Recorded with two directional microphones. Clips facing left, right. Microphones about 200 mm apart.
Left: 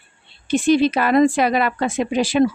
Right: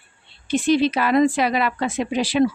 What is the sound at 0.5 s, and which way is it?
Speech, 50° left (ahead or behind).